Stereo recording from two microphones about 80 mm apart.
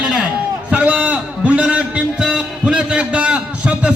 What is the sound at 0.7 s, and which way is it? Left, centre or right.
Music, centre.